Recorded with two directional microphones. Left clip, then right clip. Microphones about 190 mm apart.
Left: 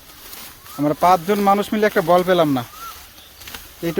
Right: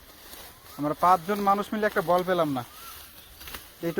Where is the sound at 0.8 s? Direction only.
30° left (ahead or behind).